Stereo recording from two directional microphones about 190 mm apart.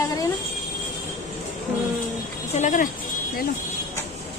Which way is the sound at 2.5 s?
40° left (ahead or behind).